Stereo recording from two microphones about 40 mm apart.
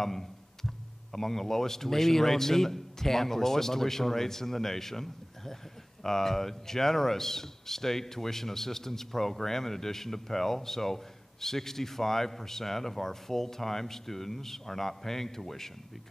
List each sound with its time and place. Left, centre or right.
0.0 s speech: centre